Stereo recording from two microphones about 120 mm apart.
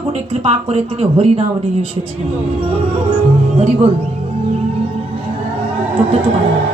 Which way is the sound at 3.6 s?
55° right (ahead or behind).